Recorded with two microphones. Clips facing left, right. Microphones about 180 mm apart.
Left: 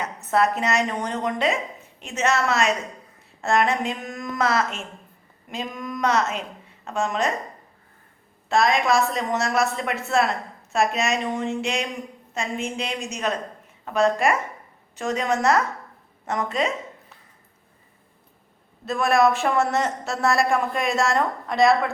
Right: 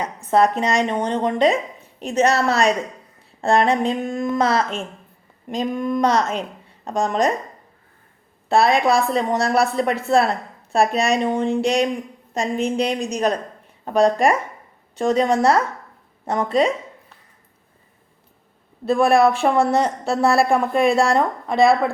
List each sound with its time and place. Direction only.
0.0 s speech: 30° right (ahead or behind)
8.4 s speech: 35° right (ahead or behind)
18.9 s speech: 30° right (ahead or behind)